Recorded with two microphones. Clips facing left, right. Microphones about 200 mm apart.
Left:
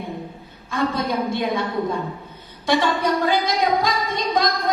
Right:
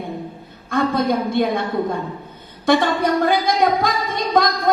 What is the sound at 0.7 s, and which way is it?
Speech, 55° right (ahead or behind).